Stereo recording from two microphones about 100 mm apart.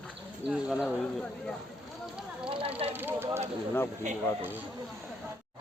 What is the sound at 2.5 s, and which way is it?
Snake, 80° right.